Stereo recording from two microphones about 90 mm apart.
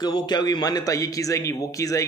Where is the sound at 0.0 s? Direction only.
50° left (ahead or behind).